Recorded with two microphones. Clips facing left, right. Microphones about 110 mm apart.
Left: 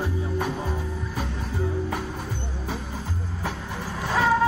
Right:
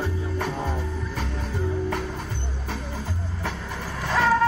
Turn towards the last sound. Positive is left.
turn(degrees=5)  # may be behind; listen again after turning